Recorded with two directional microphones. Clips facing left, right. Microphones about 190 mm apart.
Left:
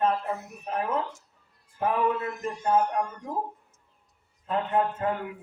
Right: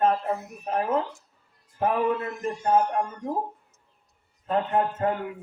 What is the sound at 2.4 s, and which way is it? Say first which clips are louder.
Speech: right 2 dB; 35° right (ahead or behind).